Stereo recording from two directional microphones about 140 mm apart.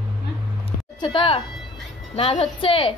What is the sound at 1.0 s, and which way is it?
Speech, 35° left (ahead or behind).